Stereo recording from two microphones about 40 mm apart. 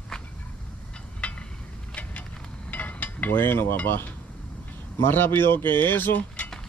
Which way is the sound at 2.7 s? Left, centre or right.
Left.